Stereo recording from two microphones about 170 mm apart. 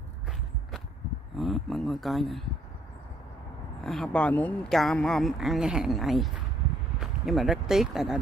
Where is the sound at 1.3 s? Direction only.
Centre (ahead or behind).